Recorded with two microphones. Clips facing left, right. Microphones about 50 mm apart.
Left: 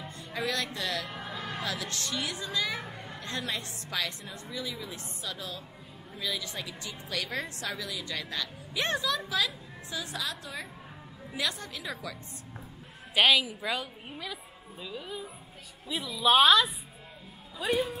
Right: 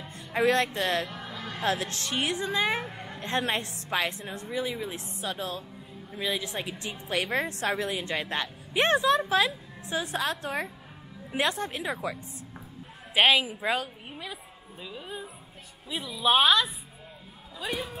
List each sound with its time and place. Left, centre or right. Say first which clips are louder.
0.5 s a woman's voice: right 7 dB; right
1.0 s music: even; centre
1.6 s a woman's voice: right 10 dB; right
2.8 s speech: right 4 dB; centre
3.2 s a woman's voice: right 7 dB; right
13.4 s a woman's voice: right 4 dB; right; by 17.9 s centre